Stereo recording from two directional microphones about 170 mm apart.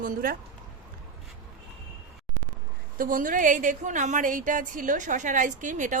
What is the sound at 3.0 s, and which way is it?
A woman's voice, 55° right (ahead or behind).